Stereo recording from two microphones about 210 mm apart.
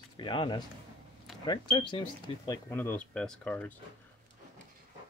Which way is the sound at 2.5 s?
10° left (ahead or behind).